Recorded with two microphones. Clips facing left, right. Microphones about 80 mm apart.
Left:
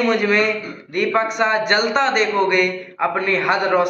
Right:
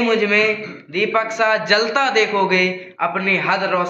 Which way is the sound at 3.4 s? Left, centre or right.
Centre.